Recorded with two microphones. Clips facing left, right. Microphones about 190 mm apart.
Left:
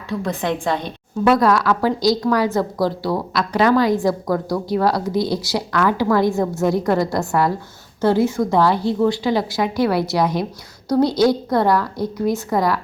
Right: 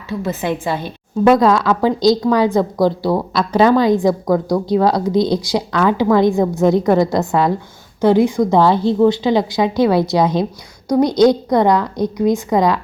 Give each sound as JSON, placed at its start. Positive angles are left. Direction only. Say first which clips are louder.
{"t": 0.1, "sound": "a woman's voice", "louder": "right 2 dB", "side_deg": -5}
{"t": 1.3, "sound": "a woman's voice", "louder": "right 3 dB", "side_deg": -20}